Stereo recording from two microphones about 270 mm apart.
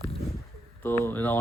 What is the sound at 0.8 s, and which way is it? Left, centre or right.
Speech, centre.